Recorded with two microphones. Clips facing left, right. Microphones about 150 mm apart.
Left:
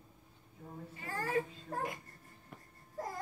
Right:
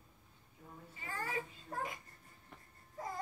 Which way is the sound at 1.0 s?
40° left (ahead or behind).